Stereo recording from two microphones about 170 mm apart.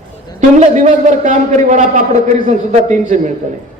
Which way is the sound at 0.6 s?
45° right (ahead or behind).